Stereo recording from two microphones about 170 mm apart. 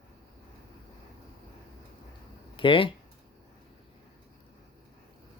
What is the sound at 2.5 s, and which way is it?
Speech, 30° left (ahead or behind).